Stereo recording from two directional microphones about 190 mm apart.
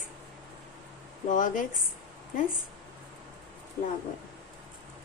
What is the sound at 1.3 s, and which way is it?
Speech, 45° left (ahead or behind).